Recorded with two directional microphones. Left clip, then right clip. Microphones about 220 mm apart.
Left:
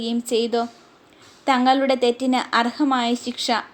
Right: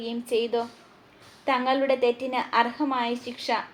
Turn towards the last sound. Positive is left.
turn(degrees=50)  # may be behind; listen again after turning